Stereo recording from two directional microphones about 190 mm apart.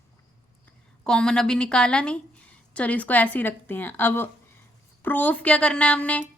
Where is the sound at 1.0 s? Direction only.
5° left (ahead or behind).